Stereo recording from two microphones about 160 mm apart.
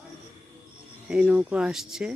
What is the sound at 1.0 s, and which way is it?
Speech, 5° right (ahead or behind).